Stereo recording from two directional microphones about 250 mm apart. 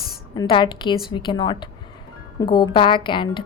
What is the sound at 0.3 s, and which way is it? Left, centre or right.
A woman's voice, centre.